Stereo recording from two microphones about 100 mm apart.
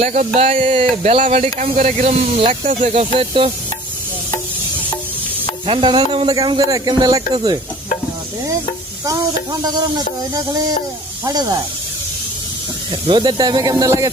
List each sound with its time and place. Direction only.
0.3 s speech: 75° right (ahead or behind)
5.6 s music: 55° right (ahead or behind)
6.6 s speech: 35° right (ahead or behind)
9.0 s speech: 40° right (ahead or behind)
12.9 s speech: 55° right (ahead or behind); by 14.1 s 35° right (ahead or behind)